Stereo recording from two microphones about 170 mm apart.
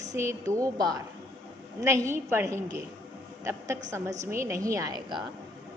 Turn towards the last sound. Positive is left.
turn(degrees=-20)  # may be behind; listen again after turning